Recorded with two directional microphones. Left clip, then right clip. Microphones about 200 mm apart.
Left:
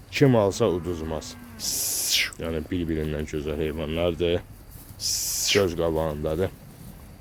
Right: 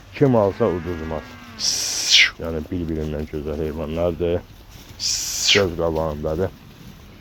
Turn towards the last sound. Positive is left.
turn(degrees=20)  # may be behind; listen again after turning